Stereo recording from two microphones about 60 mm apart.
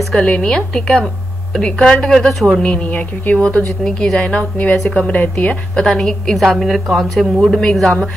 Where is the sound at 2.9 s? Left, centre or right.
Left.